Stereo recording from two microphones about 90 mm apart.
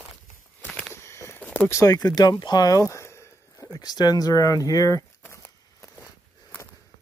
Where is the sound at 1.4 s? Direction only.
15° left (ahead or behind).